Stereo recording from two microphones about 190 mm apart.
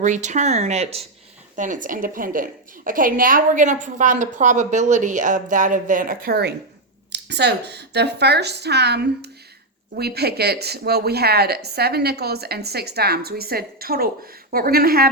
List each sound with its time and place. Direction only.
0.0 s a woman's voice: 40° right (ahead or behind)